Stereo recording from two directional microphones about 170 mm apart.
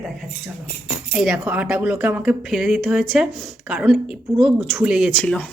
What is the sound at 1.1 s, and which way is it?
Speech, centre (ahead or behind).